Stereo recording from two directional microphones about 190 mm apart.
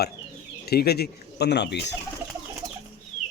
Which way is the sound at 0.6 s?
55° left (ahead or behind).